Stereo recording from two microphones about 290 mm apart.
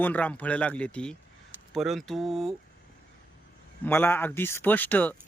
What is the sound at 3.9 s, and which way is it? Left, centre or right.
Speech, centre.